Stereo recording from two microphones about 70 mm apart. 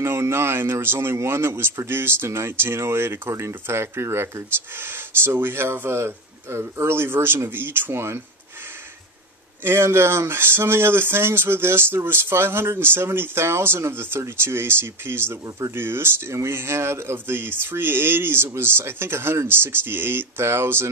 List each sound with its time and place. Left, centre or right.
0.0 s speech: right
9.6 s speech: right